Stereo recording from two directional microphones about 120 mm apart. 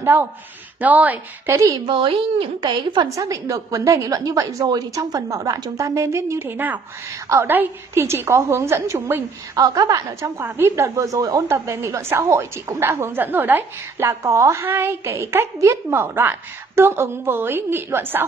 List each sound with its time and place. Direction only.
0.0 s a woman's voice: 20° right (ahead or behind)
1.9 s a woman's voice: 45° right (ahead or behind)
3.1 s a woman's voice: 25° right (ahead or behind)